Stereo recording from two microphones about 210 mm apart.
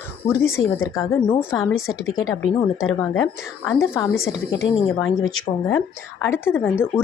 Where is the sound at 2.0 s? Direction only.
70° left (ahead or behind).